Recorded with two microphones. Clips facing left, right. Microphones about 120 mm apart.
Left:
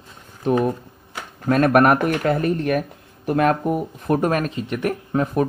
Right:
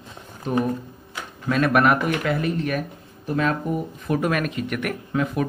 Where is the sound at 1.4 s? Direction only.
45° left (ahead or behind).